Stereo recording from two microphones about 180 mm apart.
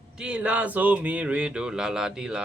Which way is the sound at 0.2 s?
5° right (ahead or behind).